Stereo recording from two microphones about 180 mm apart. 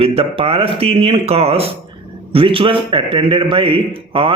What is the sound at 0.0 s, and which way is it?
A man's voice, 30° right (ahead or behind).